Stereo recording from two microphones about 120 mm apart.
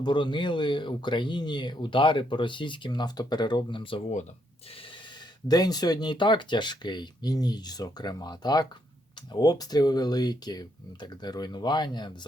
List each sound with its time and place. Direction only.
0.0 s speech: 40° left (ahead or behind)
5.5 s speech: 35° left (ahead or behind)